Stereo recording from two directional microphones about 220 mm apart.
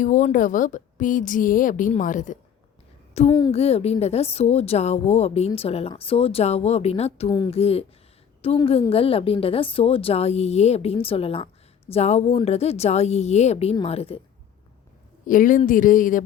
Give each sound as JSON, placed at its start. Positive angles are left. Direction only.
{"t": 0.0, "sound": "a woman's voice", "side_deg": 35}
{"t": 3.2, "sound": "a woman's voice", "side_deg": 25}
{"t": 15.3, "sound": "a woman's voice", "side_deg": 35}